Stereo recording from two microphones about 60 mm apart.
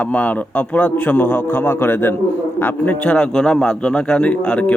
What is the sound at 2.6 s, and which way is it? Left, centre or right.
Speech, left.